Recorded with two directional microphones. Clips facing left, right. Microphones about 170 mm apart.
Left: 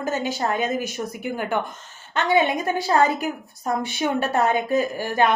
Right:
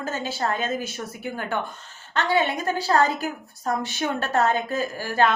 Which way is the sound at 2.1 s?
15° left (ahead or behind).